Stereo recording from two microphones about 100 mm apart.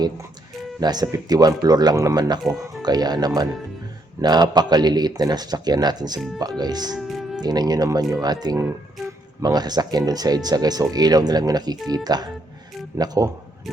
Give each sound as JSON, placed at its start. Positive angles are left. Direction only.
{"t": 0.8, "sound": "a man's voice", "side_deg": -40}
{"t": 6.9, "sound": "music", "side_deg": -5}
{"t": 7.4, "sound": "speech", "side_deg": -40}